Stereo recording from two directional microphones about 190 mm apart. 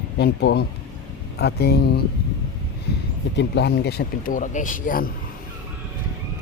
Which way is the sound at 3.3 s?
65° left (ahead or behind).